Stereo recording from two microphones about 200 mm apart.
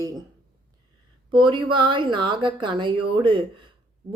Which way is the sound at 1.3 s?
25° right (ahead or behind).